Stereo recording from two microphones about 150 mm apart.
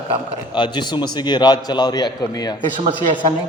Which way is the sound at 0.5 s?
30° left (ahead or behind).